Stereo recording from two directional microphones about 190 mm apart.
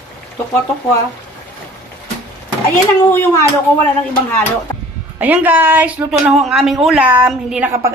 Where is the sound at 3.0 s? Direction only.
15° left (ahead or behind).